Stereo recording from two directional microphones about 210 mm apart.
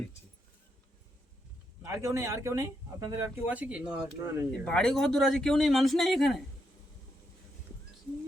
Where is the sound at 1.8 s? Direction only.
15° right (ahead or behind).